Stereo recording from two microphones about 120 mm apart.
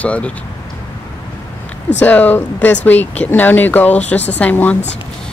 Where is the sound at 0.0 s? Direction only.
10° left (ahead or behind).